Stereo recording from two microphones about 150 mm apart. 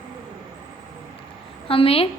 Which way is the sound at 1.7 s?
40° left (ahead or behind).